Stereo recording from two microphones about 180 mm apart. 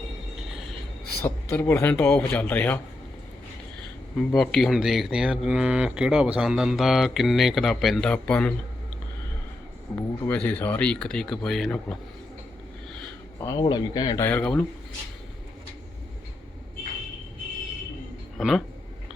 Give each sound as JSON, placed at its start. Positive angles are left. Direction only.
{"t": 1.2, "sound": "speech", "side_deg": 15}
{"t": 4.4, "sound": "speech", "side_deg": 0}
{"t": 9.9, "sound": "speech", "side_deg": 10}
{"t": 13.4, "sound": "speech", "side_deg": 20}
{"t": 14.3, "sound": "speech", "side_deg": 5}
{"t": 18.3, "sound": "speech", "side_deg": 0}